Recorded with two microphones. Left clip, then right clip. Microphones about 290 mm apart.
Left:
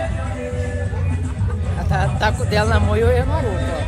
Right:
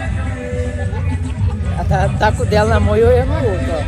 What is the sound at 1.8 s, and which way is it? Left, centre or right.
Speech, centre.